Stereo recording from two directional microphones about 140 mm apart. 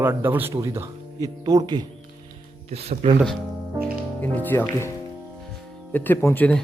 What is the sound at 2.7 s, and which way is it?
Speech, 45° right (ahead or behind).